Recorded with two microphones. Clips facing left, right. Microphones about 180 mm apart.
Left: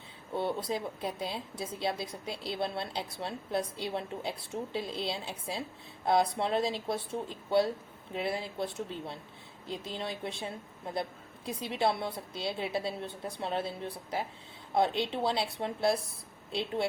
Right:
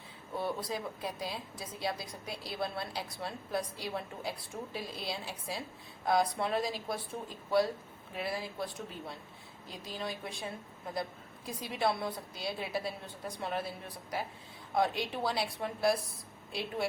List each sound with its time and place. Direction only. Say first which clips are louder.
0.3 s a woman's voice: left 3 dB; 25° left (ahead or behind)